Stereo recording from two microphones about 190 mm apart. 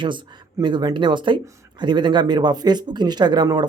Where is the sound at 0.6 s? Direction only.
25° right (ahead or behind).